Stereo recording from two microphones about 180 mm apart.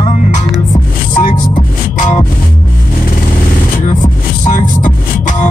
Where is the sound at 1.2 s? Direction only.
45° left (ahead or behind).